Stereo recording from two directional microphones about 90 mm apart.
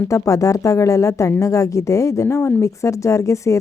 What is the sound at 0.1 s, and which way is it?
A woman's voice, 40° left (ahead or behind).